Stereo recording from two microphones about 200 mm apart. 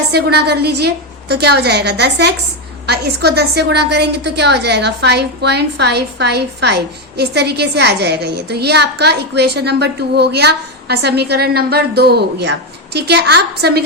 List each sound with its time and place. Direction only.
0.1 s a woman's voice: 55° right (ahead or behind)